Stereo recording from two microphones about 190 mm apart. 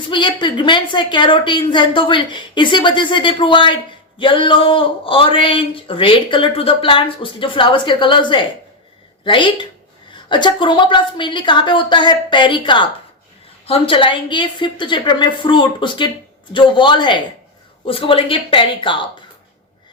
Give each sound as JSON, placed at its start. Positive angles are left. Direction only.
{"t": 0.1, "sound": "speech", "side_deg": 25}